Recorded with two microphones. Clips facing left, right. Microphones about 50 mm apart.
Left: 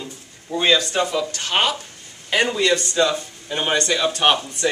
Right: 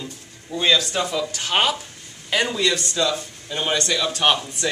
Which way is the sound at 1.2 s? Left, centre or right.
Centre.